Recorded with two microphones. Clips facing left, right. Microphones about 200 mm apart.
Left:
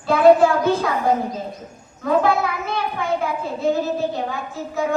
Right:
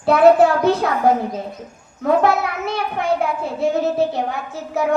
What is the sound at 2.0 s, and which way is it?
A child's voice, 65° right (ahead or behind).